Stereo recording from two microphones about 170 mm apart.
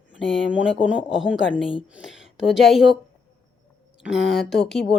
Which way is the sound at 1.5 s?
30° left (ahead or behind).